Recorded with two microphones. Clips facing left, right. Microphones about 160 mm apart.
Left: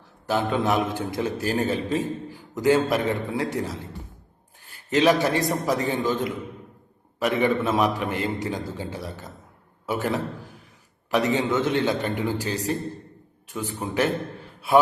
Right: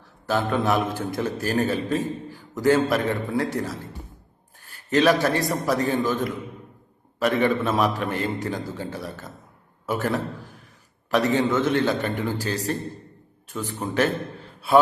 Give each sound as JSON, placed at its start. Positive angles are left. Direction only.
{"t": 0.3, "sound": "a man's voice", "side_deg": 15}